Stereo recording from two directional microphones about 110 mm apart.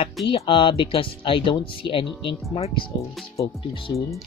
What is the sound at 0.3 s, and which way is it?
Speech, 50° left (ahead or behind).